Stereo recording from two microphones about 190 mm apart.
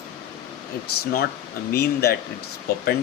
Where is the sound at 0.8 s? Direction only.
55° left (ahead or behind).